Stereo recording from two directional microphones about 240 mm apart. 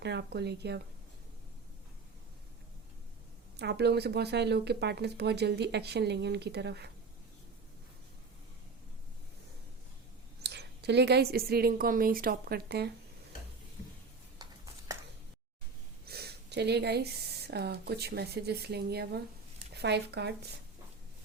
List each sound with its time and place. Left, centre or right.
0.0 s speech: right
3.6 s speech: right
10.4 s a woman's voice: right
16.0 s speech: right